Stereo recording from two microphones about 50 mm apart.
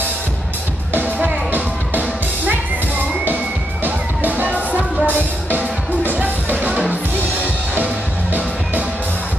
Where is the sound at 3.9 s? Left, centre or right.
Right.